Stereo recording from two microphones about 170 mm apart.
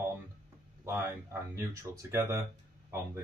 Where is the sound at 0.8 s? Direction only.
15° right (ahead or behind).